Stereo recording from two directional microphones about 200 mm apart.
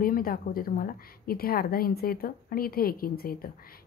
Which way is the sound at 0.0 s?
45° left (ahead or behind).